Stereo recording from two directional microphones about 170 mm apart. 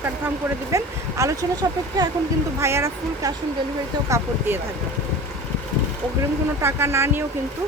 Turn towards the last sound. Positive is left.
turn(degrees=-15)  # may be behind; listen again after turning